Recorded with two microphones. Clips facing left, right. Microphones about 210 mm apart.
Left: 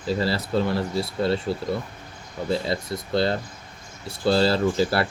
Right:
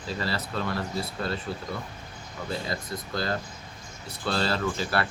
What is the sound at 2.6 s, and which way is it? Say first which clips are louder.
Speech: left 6 dB; 30° left (ahead or behind).